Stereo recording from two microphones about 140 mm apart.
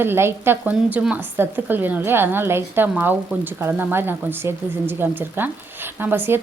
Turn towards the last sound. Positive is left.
turn(degrees=-15)  # may be behind; listen again after turning